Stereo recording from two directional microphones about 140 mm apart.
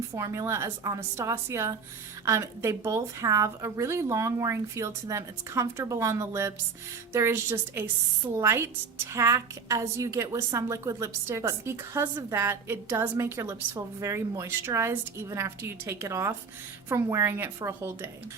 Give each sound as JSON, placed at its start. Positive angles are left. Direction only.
{"t": 0.2, "sound": "a woman's voice", "side_deg": -20}